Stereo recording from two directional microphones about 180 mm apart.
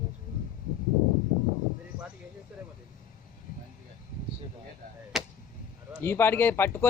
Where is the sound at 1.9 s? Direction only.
60° left (ahead or behind).